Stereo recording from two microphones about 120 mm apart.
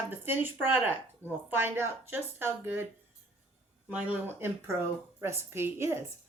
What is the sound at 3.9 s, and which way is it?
Speech, 15° right (ahead or behind).